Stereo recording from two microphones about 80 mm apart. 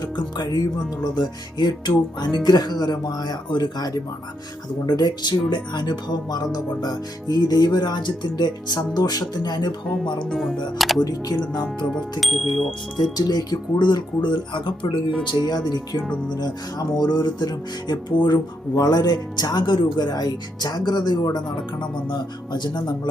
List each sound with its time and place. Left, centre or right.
0.0 s speech: left
9.8 s speech: centre
11.0 s speech: left
11.6 s speech: centre
12.2 s speech: centre
13.1 s speech: left
15.2 s speech: left
18.7 s speech: left
22.1 s speech: left